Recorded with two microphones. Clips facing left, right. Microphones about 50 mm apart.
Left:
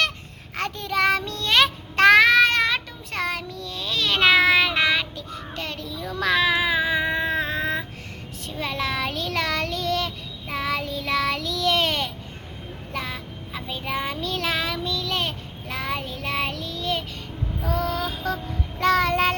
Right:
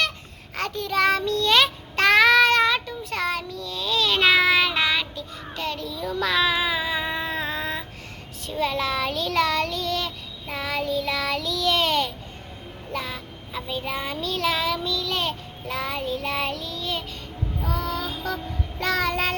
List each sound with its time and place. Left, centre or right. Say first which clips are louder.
0.5 s child singing: right 1 dB; left
5.9 s a sound: left 2 dB; left
8.4 s child singing: right 3 dB; left